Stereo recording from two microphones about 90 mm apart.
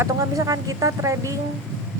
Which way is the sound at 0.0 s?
40° right (ahead or behind).